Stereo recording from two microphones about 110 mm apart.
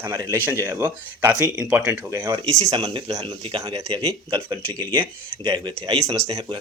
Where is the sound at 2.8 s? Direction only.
50° right (ahead or behind).